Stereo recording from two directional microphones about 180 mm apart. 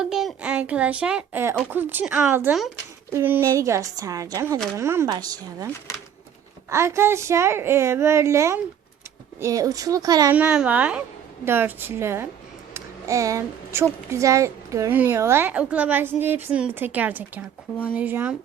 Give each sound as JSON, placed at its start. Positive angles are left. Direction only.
{"t": 0.0, "sound": "a woman's voice", "side_deg": 0}
{"t": 10.3, "sound": "a woman's voice", "side_deg": -5}
{"t": 12.7, "sound": "a sound", "side_deg": -15}
{"t": 14.1, "sound": "a woman's voice", "side_deg": -15}